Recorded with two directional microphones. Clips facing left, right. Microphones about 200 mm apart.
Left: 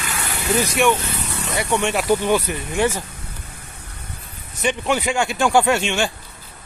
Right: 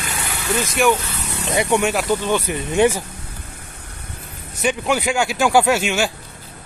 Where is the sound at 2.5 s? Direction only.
15° right (ahead or behind).